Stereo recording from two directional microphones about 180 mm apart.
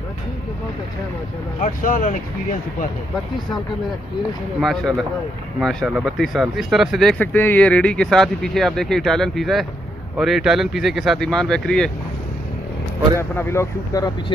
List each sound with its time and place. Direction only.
1.6 s speech: 50° left (ahead or behind)
4.6 s speech: centre (ahead or behind)
13.4 s speech: 15° left (ahead or behind)